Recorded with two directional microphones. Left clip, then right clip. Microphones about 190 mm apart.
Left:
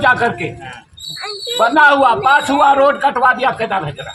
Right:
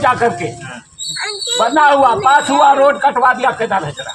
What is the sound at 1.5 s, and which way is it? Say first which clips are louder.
Speech: even; centre (ahead or behind).